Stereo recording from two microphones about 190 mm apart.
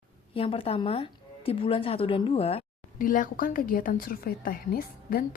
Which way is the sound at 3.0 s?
45° left (ahead or behind).